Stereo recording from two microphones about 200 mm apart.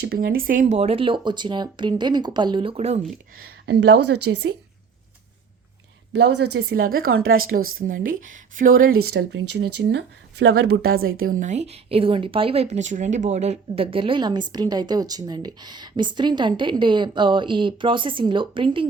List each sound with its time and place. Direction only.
0.3 s speech: 45° right (ahead or behind)
3.7 s a woman's voice: 60° right (ahead or behind)
6.1 s speech: 55° right (ahead or behind)
10.8 s speech: 90° right
11.2 s speech: 40° right (ahead or behind); by 18.9 s 25° right (ahead or behind)